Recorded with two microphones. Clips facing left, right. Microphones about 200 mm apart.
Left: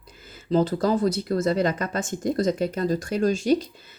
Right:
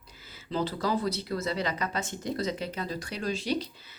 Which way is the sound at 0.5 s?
45° left (ahead or behind).